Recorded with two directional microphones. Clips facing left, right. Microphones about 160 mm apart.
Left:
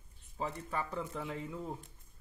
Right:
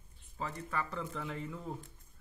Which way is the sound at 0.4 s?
15° left (ahead or behind).